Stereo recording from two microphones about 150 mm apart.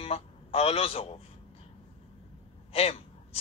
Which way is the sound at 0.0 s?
40° left (ahead or behind).